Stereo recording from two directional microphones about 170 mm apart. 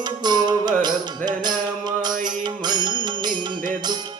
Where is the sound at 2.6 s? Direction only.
25° right (ahead or behind).